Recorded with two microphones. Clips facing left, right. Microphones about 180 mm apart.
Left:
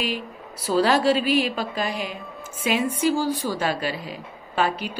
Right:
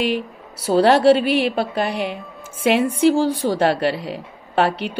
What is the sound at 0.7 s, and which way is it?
A woman's voice, 60° right (ahead or behind).